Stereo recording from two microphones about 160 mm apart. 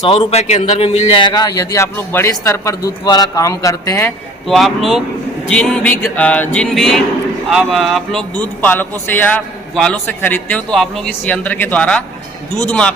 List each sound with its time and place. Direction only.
0.0 s a man's voice: 35° left (ahead or behind); by 4.1 s 15° left (ahead or behind)
4.4 s music: centre (ahead or behind)
7.5 s a man's voice: 5° left (ahead or behind)